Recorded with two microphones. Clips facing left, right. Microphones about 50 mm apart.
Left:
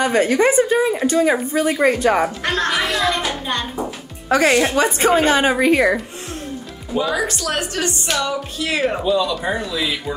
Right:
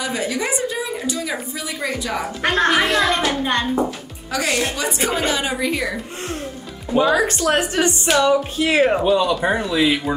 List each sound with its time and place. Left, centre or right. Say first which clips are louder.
0.0 s a woman's voice: left 8 dB; left
2.4 s a child's voice: right 3 dB; right
4.3 s a woman's voice: left 6 dB; left
7.2 s speech: right 4 dB; right